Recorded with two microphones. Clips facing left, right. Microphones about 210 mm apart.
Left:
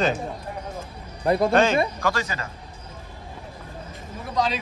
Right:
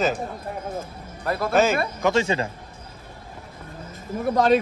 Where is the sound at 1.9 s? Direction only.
20° right (ahead or behind).